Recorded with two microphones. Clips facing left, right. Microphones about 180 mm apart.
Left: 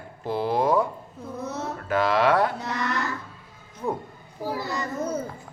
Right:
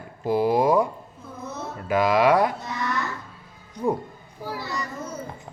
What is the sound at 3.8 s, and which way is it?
Speech, 5° right (ahead or behind).